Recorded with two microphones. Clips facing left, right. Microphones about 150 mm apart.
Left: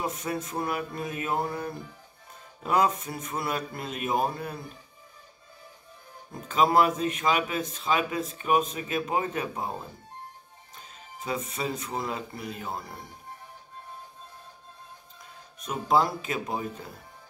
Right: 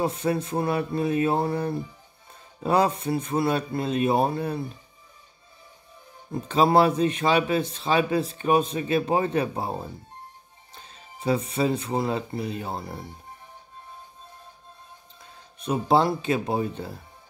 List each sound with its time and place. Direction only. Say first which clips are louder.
0.0 s speech: right 6 dB; 30° right (ahead or behind)
6.3 s speech: right 3 dB; 30° right (ahead or behind)
15.6 s speech: right 3 dB; 30° right (ahead or behind)